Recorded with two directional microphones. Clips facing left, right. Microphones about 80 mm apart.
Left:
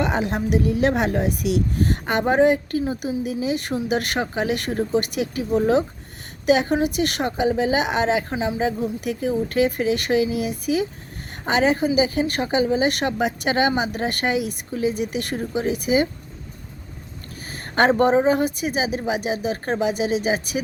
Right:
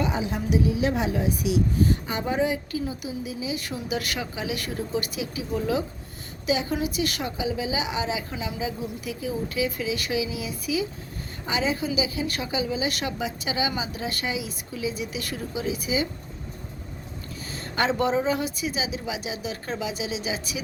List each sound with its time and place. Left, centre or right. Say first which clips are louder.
0.0 s a woman's voice: left 5 dB; left
6.4 s a woman's voice: left 7 dB; left
8.3 s a woman's voice: left 8 dB; left
17.5 s a sound: left 7 dB; left
17.9 s a woman's voice: left 5 dB; left